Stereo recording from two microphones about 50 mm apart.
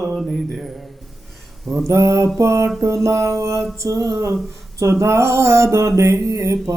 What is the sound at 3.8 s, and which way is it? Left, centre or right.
Music, right.